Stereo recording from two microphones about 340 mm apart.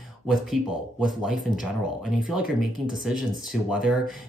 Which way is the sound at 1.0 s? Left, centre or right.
Centre.